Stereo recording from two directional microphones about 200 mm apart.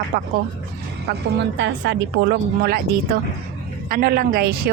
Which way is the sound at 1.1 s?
65° right (ahead or behind).